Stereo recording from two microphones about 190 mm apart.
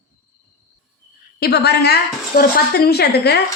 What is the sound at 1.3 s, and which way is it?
A woman's voice, 55° left (ahead or behind).